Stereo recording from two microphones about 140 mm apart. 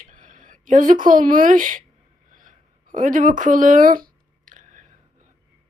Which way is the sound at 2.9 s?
65° right (ahead or behind).